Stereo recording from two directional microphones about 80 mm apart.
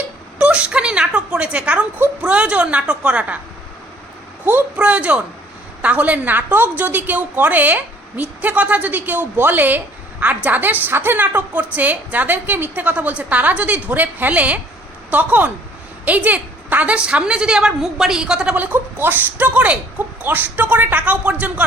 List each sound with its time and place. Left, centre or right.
0.3 s a sound: centre
2.2 s a woman's voice: centre
4.8 s a woman's voice: centre
18.6 s a woman's voice: right